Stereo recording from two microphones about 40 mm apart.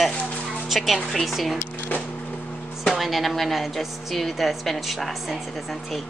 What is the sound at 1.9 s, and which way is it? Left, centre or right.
Vehicle, left.